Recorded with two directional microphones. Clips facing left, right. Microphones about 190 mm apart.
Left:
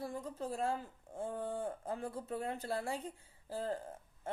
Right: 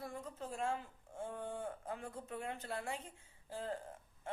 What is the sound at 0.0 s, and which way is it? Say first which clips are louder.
Speech: left 5 dB; 35° left (ahead or behind).